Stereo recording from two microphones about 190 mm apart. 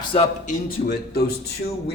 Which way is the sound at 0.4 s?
55° left (ahead or behind).